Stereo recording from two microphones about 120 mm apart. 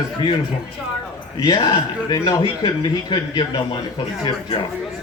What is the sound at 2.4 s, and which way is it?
Speech, 40° left (ahead or behind).